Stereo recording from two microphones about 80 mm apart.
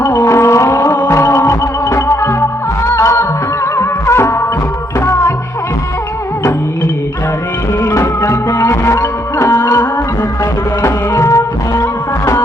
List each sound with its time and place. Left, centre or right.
0.0 s music: left
7.8 s music: left